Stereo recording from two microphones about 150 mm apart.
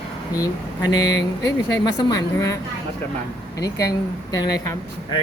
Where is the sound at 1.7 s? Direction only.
25° left (ahead or behind).